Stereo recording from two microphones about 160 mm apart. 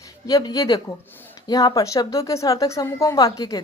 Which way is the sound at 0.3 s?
20° left (ahead or behind).